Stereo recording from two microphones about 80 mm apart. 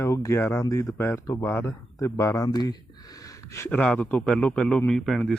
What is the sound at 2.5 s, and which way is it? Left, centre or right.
Speech, left.